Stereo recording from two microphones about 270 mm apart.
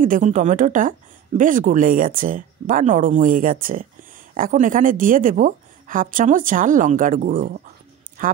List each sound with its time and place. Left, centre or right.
0.0 s a woman's voice: right